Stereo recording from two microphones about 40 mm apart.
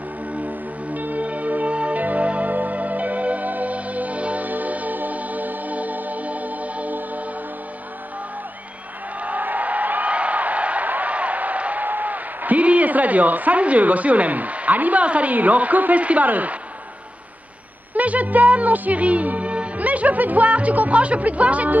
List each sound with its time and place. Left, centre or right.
0.3 s music: right
9.2 s a sound: right
11.8 s a man's voice: right
17.9 s speech: right